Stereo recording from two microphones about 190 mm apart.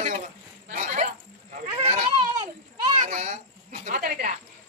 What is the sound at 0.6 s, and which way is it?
Snake, 40° right (ahead or behind).